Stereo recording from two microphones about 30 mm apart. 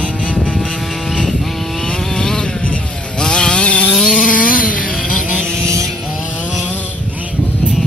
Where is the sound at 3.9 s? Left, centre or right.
Centre.